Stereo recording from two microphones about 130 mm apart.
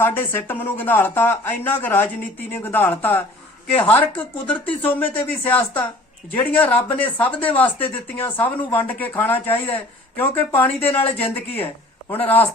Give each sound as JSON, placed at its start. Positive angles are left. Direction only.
{"t": 0.0, "sound": "speech", "side_deg": 15}
{"t": 11.0, "sound": "speech", "side_deg": 50}
{"t": 11.3, "sound": "speech", "side_deg": 15}